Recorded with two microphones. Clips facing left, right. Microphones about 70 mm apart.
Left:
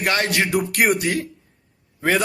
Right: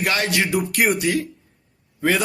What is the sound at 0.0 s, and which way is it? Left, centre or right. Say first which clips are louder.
A man's voice: left 1 dB; left.